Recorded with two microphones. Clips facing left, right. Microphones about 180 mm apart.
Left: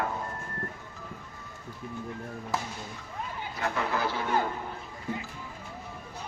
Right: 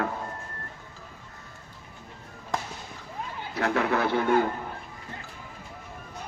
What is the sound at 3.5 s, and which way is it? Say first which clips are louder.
Speech: right 6 dB; 70° right (ahead or behind).